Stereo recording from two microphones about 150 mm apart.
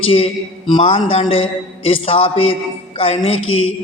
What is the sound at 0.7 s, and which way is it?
A man's voice, 35° left (ahead or behind).